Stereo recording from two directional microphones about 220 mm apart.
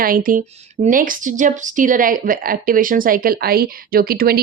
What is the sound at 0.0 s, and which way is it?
A woman's voice, 40° right (ahead or behind).